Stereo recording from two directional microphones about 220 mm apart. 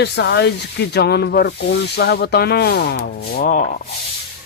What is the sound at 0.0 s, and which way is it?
Speech, 50° left (ahead or behind).